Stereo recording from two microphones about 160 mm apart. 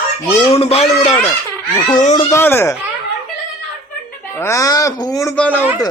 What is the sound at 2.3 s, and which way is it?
Speech, 15° left (ahead or behind).